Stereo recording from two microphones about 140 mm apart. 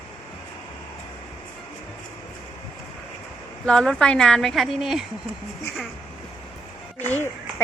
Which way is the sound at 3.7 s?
5° left (ahead or behind).